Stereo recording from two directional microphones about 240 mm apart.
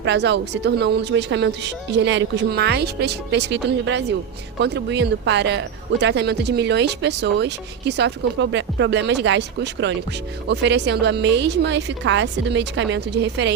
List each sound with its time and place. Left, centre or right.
0.0 s speech: right